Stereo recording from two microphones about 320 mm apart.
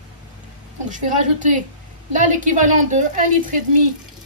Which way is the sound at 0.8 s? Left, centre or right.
Right.